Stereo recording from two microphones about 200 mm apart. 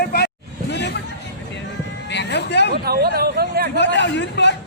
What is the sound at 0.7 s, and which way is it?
Chatter, 60° left (ahead or behind).